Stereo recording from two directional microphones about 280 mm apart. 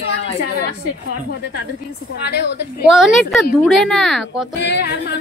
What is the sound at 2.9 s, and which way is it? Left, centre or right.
Speech, centre.